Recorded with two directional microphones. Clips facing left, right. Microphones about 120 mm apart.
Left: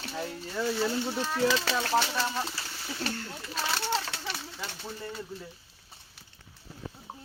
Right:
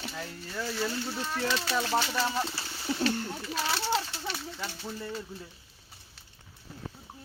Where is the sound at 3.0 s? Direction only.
20° right (ahead or behind).